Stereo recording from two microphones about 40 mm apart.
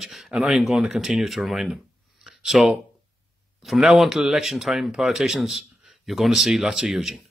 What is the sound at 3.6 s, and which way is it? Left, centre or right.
Speech, centre.